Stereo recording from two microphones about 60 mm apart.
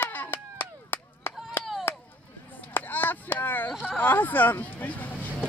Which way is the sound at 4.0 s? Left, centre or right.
Left.